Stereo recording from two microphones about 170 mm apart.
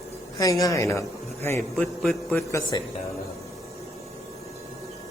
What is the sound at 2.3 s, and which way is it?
Speech, 20° left (ahead or behind).